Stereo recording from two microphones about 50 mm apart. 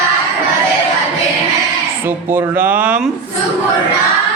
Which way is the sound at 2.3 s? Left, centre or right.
Right.